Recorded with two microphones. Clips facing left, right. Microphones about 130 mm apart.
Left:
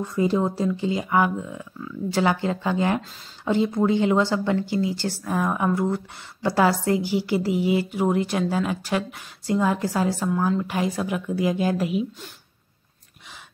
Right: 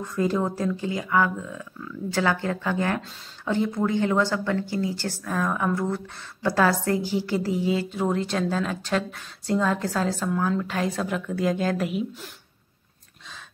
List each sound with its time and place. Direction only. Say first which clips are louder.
0.0 s a woman's voice: left 2 dB; 15° left (ahead or behind)